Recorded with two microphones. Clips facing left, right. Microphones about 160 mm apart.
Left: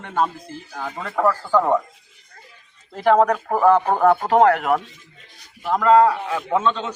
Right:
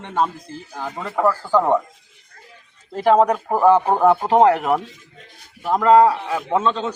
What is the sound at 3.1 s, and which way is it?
A man's voice, 10° right (ahead or behind).